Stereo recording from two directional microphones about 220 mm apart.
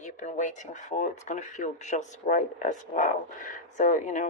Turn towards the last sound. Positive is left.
turn(degrees=35)  # may be behind; listen again after turning